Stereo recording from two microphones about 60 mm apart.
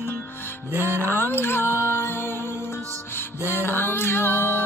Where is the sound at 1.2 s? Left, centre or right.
Left.